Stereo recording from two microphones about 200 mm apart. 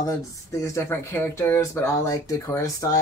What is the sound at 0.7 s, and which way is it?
Speech, 15° left (ahead or behind).